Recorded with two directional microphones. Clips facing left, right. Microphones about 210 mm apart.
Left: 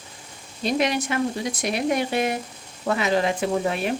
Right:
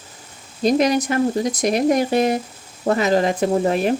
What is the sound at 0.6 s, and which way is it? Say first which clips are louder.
Speech: right 6 dB; 40° right (ahead or behind).